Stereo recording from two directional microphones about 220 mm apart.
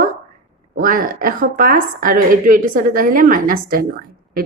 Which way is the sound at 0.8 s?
40° right (ahead or behind).